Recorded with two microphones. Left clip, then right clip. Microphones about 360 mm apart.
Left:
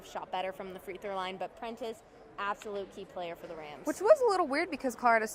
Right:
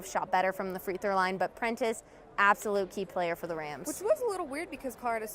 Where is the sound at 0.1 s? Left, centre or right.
Right.